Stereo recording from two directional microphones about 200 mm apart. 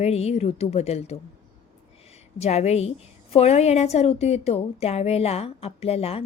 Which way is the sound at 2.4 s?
35° left (ahead or behind).